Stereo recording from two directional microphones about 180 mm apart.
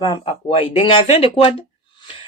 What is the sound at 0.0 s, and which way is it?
Speech, 30° left (ahead or behind).